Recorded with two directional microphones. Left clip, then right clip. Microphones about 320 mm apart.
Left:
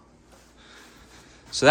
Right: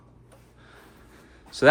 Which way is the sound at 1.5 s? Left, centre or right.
Centre.